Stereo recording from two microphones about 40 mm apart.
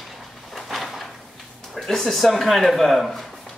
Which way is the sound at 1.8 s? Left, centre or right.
Centre.